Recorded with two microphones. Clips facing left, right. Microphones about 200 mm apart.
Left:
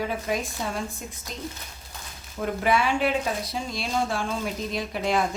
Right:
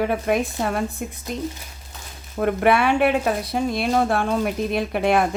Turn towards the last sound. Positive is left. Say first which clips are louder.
# right 6 dB
turn(degrees=-60)  # may be behind; listen again after turning